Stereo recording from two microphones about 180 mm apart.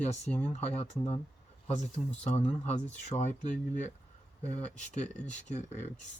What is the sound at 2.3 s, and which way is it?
Speech, 40° left (ahead or behind).